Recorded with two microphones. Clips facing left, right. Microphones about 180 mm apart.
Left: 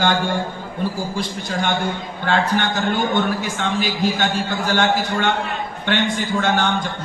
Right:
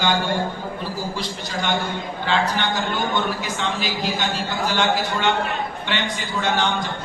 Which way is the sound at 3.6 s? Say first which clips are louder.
Left 4 dB; 50° left (ahead or behind).